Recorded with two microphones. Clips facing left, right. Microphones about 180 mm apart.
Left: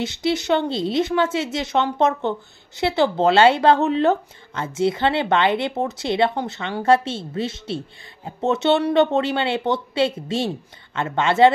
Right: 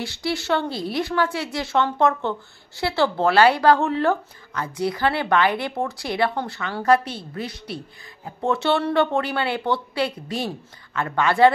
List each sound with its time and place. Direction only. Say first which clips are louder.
0.0 s speech: left 4 dB; 20° left (ahead or behind)